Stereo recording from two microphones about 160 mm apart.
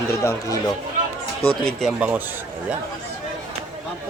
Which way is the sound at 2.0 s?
10° right (ahead or behind).